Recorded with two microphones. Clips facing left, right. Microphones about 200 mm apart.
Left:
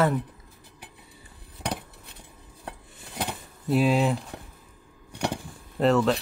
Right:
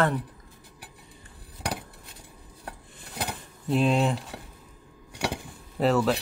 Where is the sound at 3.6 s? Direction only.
5° left (ahead or behind).